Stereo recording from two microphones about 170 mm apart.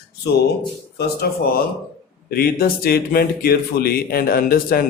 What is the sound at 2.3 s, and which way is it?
Speech, 60° left (ahead or behind).